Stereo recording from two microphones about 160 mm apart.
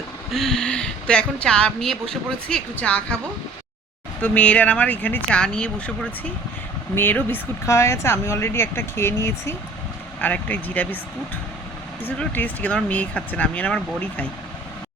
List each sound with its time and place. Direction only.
0.3 s speech: centre (ahead or behind)
4.2 s speech: 10° left (ahead or behind)
12.0 s speech: 10° left (ahead or behind)